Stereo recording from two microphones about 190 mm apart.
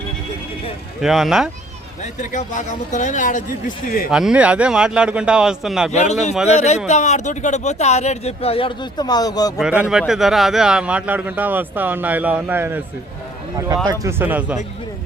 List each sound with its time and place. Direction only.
1.0 s a man's voice: centre (ahead or behind)
2.3 s speech: 40° left (ahead or behind)
4.1 s a man's voice: 5° right (ahead or behind)
5.9 s speech: 35° left (ahead or behind); by 9.5 s 20° left (ahead or behind)
9.6 s a man's voice: 5° right (ahead or behind)
14.0 s a man's voice: 10° right (ahead or behind)